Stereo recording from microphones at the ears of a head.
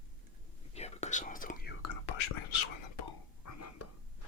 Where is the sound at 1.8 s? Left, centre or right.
Left.